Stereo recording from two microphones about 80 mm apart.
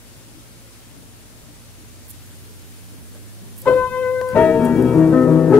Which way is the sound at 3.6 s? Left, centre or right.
Left.